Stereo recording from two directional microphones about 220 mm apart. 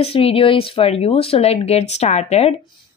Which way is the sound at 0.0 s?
25° left (ahead or behind).